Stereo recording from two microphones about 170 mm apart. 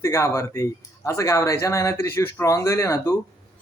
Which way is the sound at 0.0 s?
15° left (ahead or behind).